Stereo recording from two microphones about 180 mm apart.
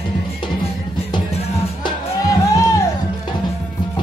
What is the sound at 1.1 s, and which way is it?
Music, 30° left (ahead or behind).